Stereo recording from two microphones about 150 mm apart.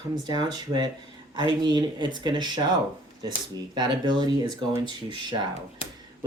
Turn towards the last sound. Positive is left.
turn(degrees=40)  # may be behind; listen again after turning